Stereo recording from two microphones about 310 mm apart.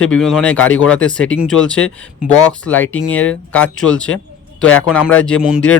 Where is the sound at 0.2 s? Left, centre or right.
Centre.